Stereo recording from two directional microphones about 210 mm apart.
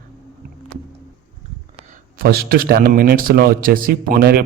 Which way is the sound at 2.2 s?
45° right (ahead or behind).